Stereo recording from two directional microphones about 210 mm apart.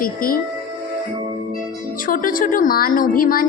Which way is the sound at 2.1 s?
40° left (ahead or behind).